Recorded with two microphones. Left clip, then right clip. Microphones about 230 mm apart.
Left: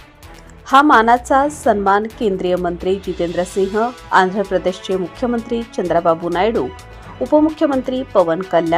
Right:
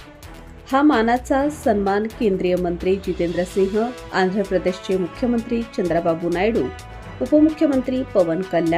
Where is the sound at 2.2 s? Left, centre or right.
Centre.